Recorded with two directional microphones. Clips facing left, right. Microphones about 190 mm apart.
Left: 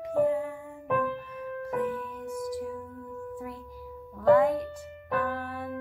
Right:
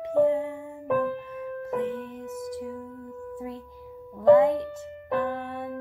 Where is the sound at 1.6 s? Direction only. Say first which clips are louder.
Right 1 dB; 25° right (ahead or behind).